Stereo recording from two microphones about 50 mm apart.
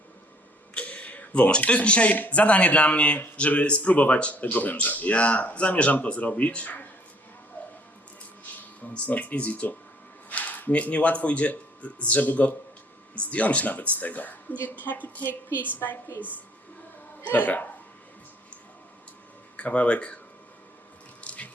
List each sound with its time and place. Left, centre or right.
0.7 s a sound: left
2.1 s speech: left
8.9 s speech: left
15.2 s speech: left
17.3 s speech: left
19.5 s speech: left
21.2 s a sound: left